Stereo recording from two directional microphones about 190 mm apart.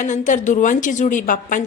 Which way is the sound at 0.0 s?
40° left (ahead or behind).